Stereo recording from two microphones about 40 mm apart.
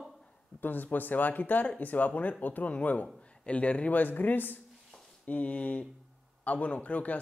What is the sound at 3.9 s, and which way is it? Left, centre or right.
Speech, left.